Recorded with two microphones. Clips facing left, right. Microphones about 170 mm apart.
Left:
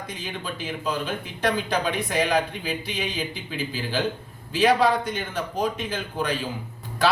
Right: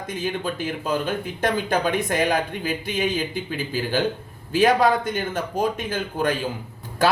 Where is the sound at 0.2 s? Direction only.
45° right (ahead or behind).